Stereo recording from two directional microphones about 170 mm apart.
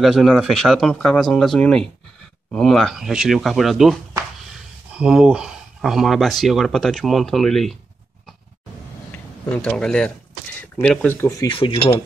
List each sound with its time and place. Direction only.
0.0 s speech: centre (ahead or behind)
9.1 s speech: 10° left (ahead or behind)
11.4 s speech: 30° left (ahead or behind)